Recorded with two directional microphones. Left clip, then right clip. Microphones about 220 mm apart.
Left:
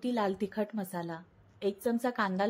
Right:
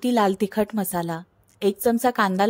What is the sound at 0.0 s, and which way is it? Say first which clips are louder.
A woman's voice: right 11 dB; 50° right (ahead or behind).